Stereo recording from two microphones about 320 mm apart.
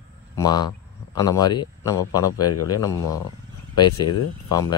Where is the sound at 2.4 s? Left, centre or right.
Left.